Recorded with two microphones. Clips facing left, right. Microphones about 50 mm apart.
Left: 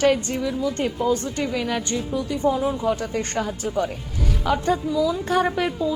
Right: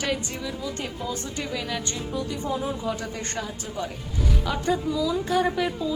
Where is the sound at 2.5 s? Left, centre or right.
Centre.